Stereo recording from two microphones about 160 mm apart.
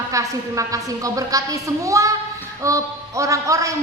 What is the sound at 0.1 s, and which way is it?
A man's voice, 20° right (ahead or behind).